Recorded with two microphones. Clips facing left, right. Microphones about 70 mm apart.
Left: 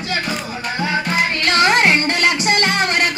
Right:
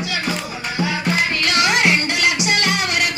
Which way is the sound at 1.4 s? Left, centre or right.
Left.